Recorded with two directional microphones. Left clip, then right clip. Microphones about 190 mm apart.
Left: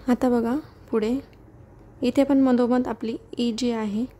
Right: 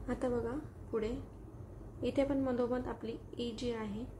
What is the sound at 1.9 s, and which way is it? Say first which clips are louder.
A woman's voice: left 13 dB; 55° left (ahead or behind).